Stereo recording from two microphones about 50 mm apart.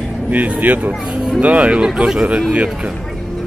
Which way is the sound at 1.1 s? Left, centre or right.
Centre.